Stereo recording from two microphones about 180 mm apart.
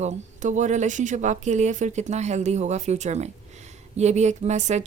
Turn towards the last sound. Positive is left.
turn(degrees=-40)  # may be behind; listen again after turning